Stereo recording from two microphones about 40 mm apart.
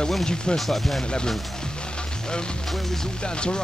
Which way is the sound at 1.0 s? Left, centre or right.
Left.